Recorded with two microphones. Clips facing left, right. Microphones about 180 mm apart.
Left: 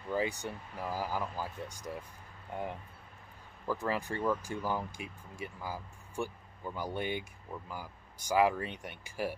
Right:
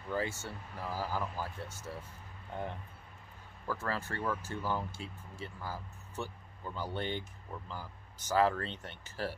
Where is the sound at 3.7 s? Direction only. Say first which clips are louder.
Left 3 dB; 15° left (ahead or behind).